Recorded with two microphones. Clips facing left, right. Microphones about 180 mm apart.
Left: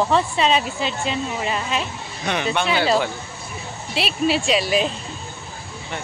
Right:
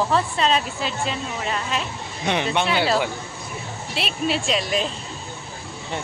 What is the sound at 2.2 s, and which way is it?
Speech, 25° right (ahead or behind).